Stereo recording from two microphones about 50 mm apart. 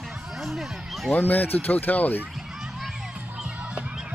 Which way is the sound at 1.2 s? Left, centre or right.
Left.